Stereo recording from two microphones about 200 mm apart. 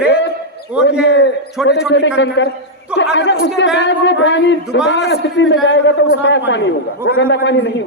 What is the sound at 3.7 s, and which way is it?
Speech, 60° left (ahead or behind).